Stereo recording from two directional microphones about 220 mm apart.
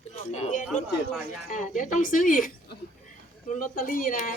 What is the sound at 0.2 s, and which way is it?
Speech, 30° left (ahead or behind).